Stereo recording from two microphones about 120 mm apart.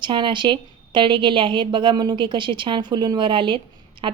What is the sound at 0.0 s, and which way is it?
A woman's voice, 40° right (ahead or behind).